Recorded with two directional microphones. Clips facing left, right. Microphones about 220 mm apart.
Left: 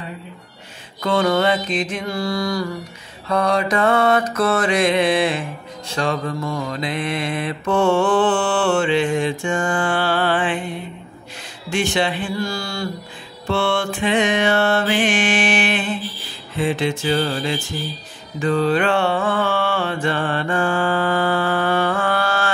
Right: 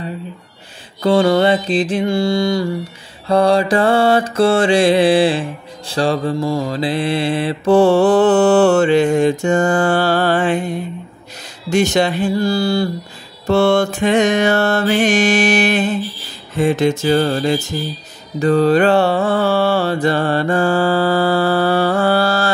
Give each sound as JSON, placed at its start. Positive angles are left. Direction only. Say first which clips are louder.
{"t": 1.0, "sound": "mantra", "louder": "right 5 dB", "side_deg": -30}
{"t": 16.5, "sound": "a sound", "louder": "right 6 dB", "side_deg": -45}
{"t": 18.4, "sound": "mantra", "louder": "right 6 dB", "side_deg": -40}